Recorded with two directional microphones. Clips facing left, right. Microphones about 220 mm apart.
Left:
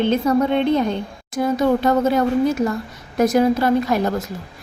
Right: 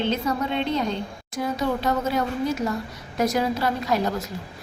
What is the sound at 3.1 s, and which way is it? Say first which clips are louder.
A woman's voice: left 7 dB; 50° left (ahead or behind).